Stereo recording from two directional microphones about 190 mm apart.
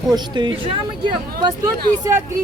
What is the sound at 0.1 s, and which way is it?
Speech, 25° right (ahead or behind).